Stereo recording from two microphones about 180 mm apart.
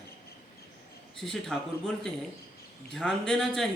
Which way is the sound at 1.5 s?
5° left (ahead or behind).